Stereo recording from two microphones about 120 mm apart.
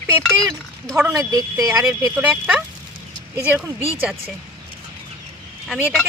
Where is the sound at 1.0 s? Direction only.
25° right (ahead or behind).